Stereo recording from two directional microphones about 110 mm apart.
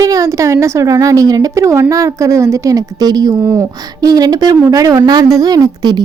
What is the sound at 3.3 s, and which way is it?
A woman's voice, 25° right (ahead or behind).